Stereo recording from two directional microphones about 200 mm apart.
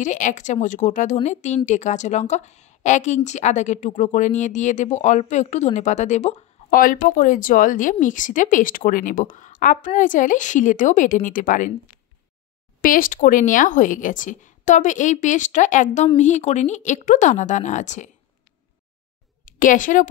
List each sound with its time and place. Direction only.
0.0 s speech: 40° left (ahead or behind)
12.8 s speech: 45° left (ahead or behind)
19.4 s a woman's voice: 40° left (ahead or behind)